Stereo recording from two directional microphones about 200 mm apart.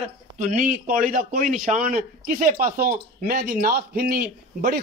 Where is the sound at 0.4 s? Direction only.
45° right (ahead or behind).